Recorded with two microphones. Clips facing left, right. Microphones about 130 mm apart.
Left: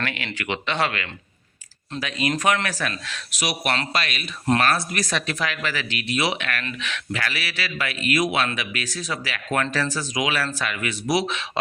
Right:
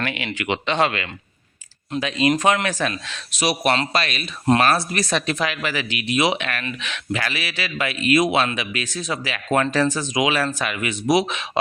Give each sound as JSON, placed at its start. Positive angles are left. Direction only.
{"t": 0.0, "sound": "speech", "side_deg": -20}